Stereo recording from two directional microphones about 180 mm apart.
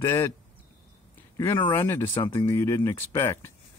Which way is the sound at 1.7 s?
10° left (ahead or behind).